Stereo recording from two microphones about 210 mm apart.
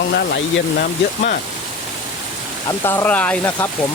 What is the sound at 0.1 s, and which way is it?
Speech, 50° left (ahead or behind).